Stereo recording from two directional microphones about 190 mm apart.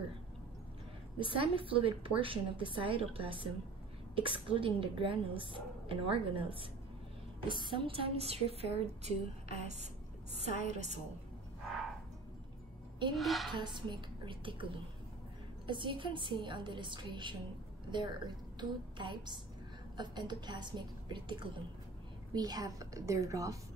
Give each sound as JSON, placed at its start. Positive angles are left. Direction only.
{"t": 1.6, "sound": "a woman's voice", "side_deg": -30}
{"t": 13.1, "sound": "a woman's voice", "side_deg": 0}
{"t": 13.5, "sound": "a woman's voice", "side_deg": -25}